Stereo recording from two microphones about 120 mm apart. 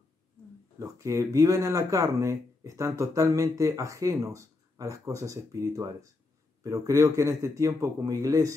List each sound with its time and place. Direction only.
0.7 s speech: 25° right (ahead or behind)